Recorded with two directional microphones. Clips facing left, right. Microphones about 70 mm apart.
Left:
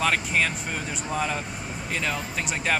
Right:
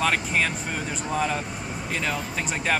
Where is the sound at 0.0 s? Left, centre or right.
Centre.